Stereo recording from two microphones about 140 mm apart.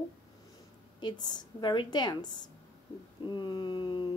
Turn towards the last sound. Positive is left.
turn(degrees=30)  # may be behind; listen again after turning